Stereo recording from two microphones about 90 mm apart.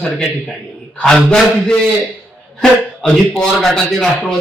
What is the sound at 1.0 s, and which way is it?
Speech, 5° left (ahead or behind).